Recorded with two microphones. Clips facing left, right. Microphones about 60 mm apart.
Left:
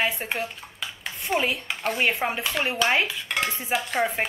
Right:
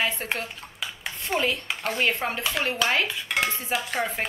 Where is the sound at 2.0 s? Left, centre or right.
Centre.